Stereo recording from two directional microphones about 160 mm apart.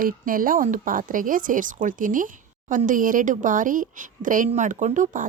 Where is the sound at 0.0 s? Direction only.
60° right (ahead or behind).